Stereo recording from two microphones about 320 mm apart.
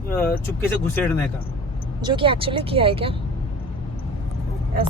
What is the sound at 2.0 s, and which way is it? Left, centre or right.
Speech, centre.